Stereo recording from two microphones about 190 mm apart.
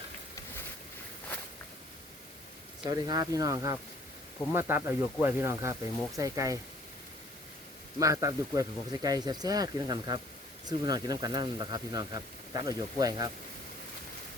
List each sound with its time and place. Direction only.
2.8 s speech: 20° right (ahead or behind)
7.9 s speech: 15° right (ahead or behind)